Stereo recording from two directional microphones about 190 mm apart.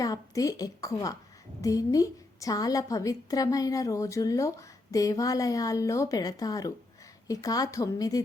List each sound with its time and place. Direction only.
0.0 s a woman's voice: 20° left (ahead or behind)